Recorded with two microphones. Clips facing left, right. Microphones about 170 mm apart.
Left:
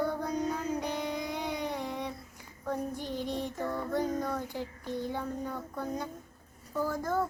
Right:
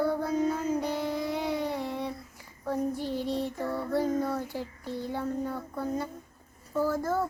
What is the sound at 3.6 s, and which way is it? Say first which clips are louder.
Child singing: right 2 dB; 10° right (ahead or behind).